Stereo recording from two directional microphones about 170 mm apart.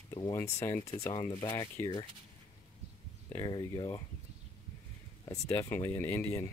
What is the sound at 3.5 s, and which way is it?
Speech, 25° left (ahead or behind).